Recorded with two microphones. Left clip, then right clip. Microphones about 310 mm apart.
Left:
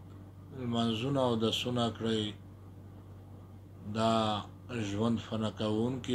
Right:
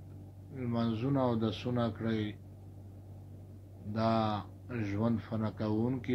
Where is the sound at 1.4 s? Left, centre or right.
Left.